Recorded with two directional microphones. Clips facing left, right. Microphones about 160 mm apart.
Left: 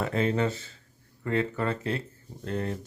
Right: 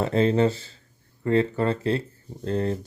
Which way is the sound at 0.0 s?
30° right (ahead or behind).